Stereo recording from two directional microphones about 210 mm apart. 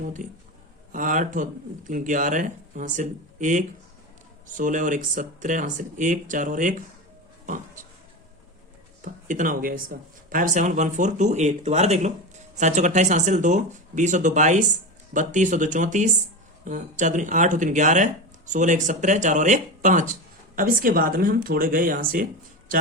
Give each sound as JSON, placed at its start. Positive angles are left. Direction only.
{"t": 0.0, "sound": "a man's voice", "side_deg": -40}
{"t": 9.0, "sound": "speech", "side_deg": -40}